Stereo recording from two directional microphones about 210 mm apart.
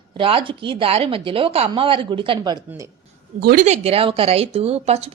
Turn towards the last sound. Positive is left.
turn(degrees=-30)  # may be behind; listen again after turning